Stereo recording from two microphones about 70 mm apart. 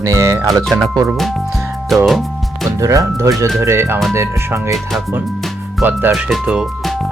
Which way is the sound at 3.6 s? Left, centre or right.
Right.